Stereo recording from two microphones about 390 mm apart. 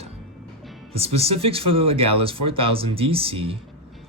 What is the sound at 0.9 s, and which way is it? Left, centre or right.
Speech, centre.